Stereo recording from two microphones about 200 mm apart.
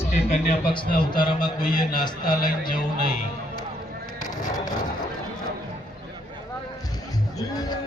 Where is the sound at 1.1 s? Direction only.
20° left (ahead or behind).